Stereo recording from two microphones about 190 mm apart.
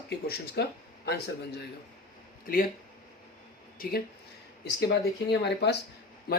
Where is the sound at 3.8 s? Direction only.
55° left (ahead or behind).